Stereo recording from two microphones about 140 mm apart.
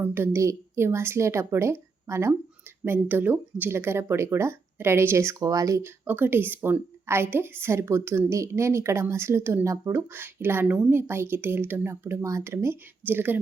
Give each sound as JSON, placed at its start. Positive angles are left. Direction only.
{"t": 0.0, "sound": "speech", "side_deg": -15}